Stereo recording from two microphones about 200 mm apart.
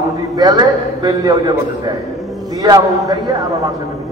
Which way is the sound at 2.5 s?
20° right (ahead or behind).